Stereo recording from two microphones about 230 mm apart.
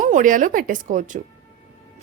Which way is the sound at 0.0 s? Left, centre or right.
Right.